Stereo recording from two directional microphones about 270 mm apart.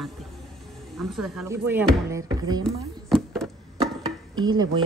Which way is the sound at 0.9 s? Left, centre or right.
Centre.